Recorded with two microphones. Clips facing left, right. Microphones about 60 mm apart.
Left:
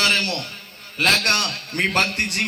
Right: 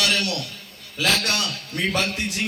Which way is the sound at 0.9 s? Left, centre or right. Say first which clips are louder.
Left 3 dB; left.